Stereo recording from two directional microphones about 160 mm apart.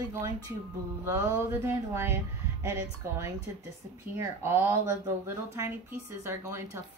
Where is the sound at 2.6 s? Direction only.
15° right (ahead or behind).